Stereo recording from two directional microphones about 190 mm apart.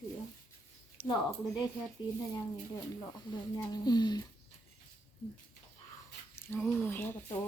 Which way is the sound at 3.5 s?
20° left (ahead or behind).